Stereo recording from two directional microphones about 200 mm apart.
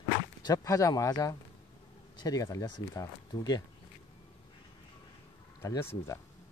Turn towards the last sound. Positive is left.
turn(degrees=15)  # may be behind; listen again after turning